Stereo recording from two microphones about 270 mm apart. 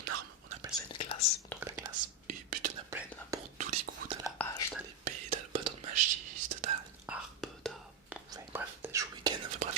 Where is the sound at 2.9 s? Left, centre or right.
Centre.